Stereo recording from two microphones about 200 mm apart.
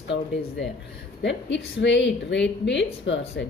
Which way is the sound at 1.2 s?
65° left (ahead or behind).